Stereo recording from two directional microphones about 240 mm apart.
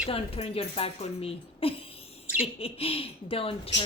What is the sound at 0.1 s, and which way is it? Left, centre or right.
Speech, left.